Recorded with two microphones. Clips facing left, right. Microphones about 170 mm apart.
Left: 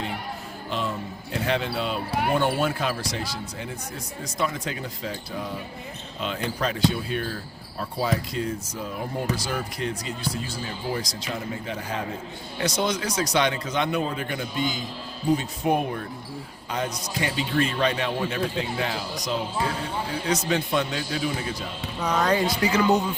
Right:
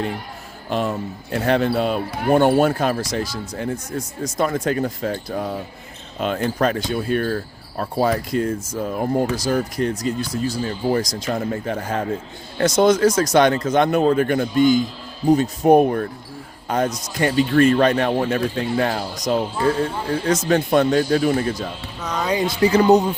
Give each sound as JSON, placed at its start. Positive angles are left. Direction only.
{"t": 0.7, "sound": "speech", "side_deg": -50}
{"t": 22.4, "sound": "speech", "side_deg": -30}